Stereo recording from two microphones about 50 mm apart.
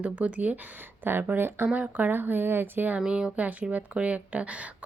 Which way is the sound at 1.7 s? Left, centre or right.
Right.